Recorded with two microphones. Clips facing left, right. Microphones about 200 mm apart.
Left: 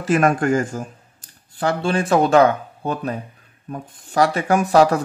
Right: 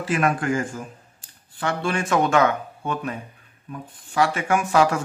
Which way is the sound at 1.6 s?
35° left (ahead or behind).